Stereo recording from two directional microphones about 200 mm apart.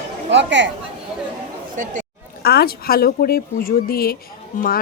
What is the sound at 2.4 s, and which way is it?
A woman's voice, 50° left (ahead or behind).